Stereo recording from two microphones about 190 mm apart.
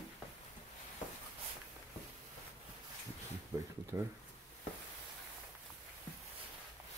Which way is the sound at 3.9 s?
15° right (ahead or behind).